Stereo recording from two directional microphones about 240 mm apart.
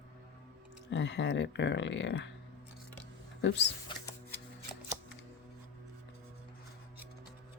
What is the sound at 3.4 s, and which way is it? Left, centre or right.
Speech, left.